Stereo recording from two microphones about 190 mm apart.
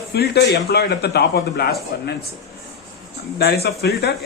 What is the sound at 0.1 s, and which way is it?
A man's voice, 60° left (ahead or behind).